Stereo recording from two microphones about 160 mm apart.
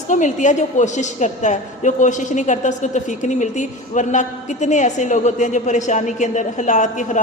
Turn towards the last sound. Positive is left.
turn(degrees=50)  # may be behind; listen again after turning